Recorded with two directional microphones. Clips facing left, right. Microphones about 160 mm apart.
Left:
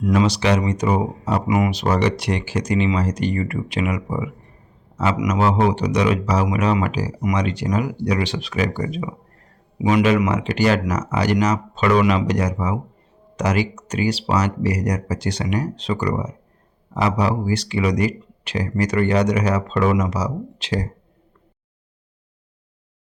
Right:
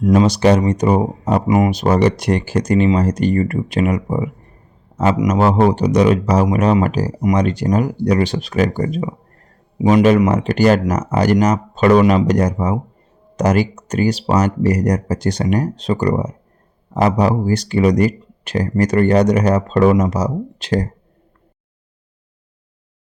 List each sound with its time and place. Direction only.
0.0 s speech: 40° right (ahead or behind)